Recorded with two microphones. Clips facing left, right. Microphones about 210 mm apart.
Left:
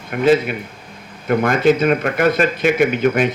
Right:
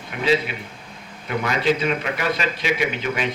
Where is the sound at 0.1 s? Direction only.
50° left (ahead or behind).